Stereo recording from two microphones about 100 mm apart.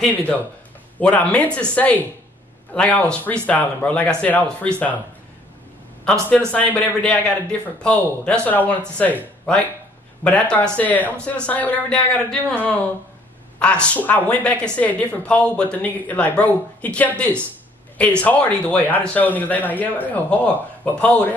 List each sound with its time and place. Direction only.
0.1 s a woman's voice: 15° left (ahead or behind)
6.5 s a woman's voice: 15° left (ahead or behind)